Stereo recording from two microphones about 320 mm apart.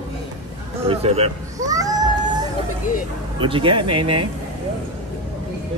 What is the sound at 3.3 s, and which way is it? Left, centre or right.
Speech, centre.